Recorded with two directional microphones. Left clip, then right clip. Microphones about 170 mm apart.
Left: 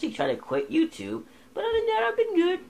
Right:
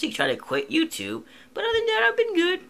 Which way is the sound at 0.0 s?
15° right (ahead or behind).